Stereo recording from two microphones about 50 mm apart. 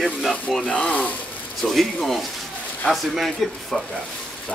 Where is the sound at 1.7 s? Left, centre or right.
Centre.